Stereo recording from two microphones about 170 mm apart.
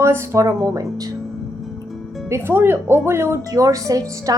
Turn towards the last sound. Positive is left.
turn(degrees=-20)  # may be behind; listen again after turning